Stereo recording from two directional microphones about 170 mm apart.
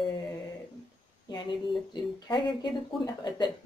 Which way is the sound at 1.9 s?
25° left (ahead or behind).